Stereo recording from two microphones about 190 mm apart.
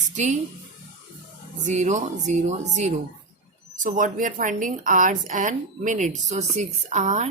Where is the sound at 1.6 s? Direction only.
40° right (ahead or behind).